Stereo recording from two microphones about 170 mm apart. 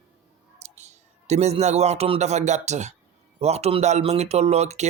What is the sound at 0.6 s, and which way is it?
A man's voice, 40° right (ahead or behind).